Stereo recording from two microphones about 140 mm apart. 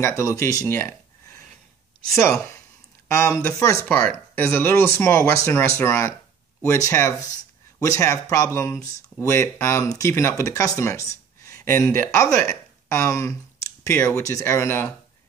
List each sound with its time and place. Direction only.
0.2 s speech: 20° left (ahead or behind)
2.1 s speech: 20° left (ahead or behind)
12.4 s a sound: 20° left (ahead or behind)
13.8 s speech: 20° left (ahead or behind)